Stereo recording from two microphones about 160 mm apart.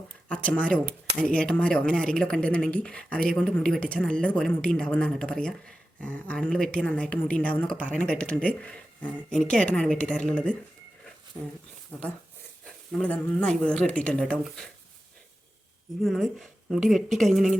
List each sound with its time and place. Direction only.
0.3 s speech: 10° left (ahead or behind)
11.9 s speech: 5° left (ahead or behind)
16.0 s speech: centre (ahead or behind)